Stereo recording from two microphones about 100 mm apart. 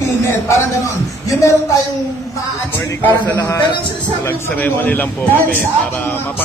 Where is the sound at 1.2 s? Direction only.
35° left (ahead or behind).